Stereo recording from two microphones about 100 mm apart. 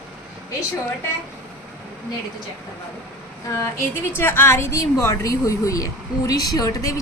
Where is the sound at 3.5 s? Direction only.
25° left (ahead or behind).